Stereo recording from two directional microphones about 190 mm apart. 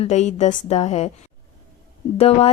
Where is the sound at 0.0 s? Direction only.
35° left (ahead or behind).